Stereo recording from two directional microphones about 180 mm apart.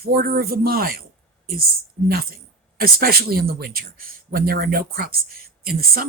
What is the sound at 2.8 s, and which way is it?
Speech, 55° right (ahead or behind).